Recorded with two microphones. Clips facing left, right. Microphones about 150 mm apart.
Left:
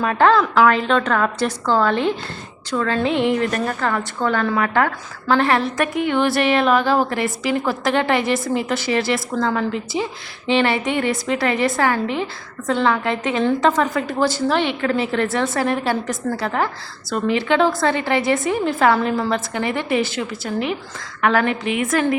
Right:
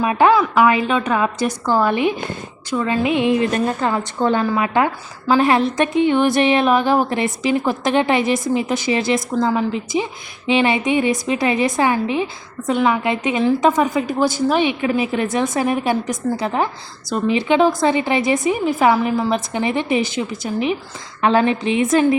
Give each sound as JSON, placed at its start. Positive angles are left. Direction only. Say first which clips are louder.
{"t": 0.0, "sound": "a woman's voice", "louder": "right 1 dB", "side_deg": -10}